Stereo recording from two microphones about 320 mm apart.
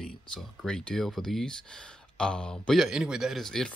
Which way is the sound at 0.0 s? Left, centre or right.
Centre.